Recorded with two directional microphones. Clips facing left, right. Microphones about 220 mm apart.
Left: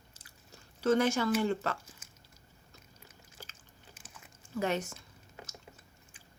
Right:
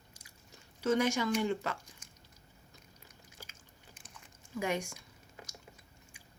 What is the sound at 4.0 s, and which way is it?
Dog, 5° left (ahead or behind).